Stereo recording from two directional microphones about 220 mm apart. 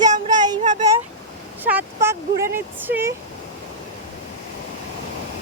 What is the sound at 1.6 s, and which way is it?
Speech, 10° right (ahead or behind).